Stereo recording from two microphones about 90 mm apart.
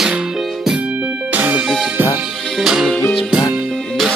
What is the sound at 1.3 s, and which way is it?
Music, 20° right (ahead or behind).